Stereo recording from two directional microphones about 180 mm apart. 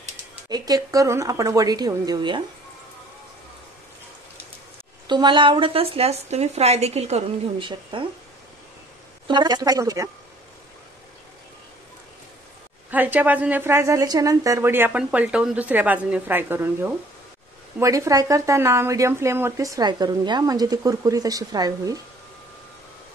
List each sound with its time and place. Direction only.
0.5 s speech: 20° right (ahead or behind)
5.0 s a woman's voice: 25° right (ahead or behind)
9.3 s speech: 25° right (ahead or behind)
12.9 s a woman's voice: 10° right (ahead or behind)